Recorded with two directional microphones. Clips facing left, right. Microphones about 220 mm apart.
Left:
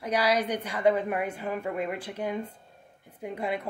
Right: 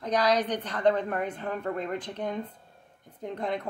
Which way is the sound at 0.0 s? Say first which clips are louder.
Right 1 dB; 10° left (ahead or behind).